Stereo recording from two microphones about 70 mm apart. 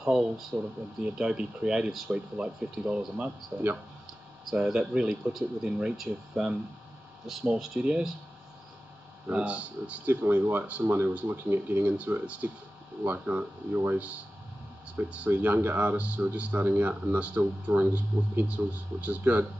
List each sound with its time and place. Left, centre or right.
0.0 s speech: centre; by 3.7 s right
4.5 s speech: centre
9.3 s speech: centre